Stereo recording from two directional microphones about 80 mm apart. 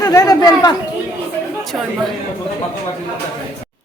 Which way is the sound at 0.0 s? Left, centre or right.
Left.